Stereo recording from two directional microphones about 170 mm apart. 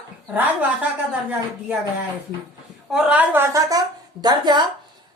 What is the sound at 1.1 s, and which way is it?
Speech, 5° right (ahead or behind).